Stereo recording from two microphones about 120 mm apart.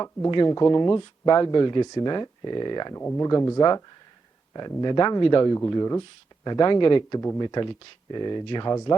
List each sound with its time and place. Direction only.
0.3 s speech: 35° left (ahead or behind)